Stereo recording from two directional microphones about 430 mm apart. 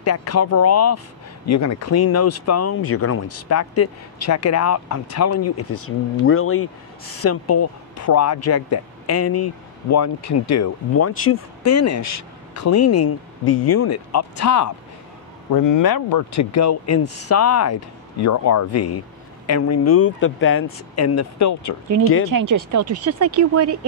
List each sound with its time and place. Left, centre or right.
0.0 s speech: left
15.8 s speech: left
22.7 s speech: right